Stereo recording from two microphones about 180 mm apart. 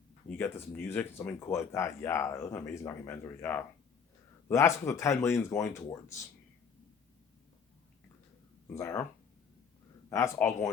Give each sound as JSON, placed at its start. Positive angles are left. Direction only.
{"t": 0.3, "sound": "speech", "side_deg": 10}
{"t": 8.7, "sound": "speech", "side_deg": 15}
{"t": 10.1, "sound": "speech", "side_deg": 15}